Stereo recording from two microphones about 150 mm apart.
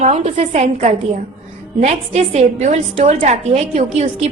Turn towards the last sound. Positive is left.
turn(degrees=-40)  # may be behind; listen again after turning